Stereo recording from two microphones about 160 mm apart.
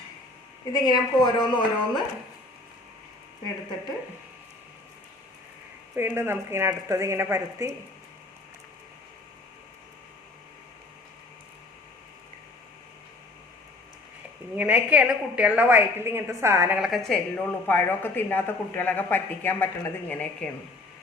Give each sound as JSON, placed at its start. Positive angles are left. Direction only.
{"t": 0.6, "sound": "a woman's voice", "side_deg": 25}
{"t": 6.0, "sound": "a woman's voice", "side_deg": -15}
{"t": 14.5, "sound": "a woman's voice", "side_deg": -10}